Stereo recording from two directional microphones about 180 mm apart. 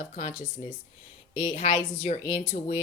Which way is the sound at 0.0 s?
40° left (ahead or behind).